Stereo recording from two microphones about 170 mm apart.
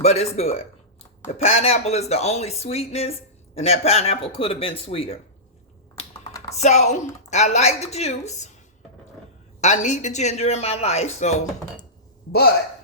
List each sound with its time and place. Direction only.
0.0 s speech: 40° left (ahead or behind)
6.5 s speech: 40° left (ahead or behind)
9.6 s speech: 45° left (ahead or behind)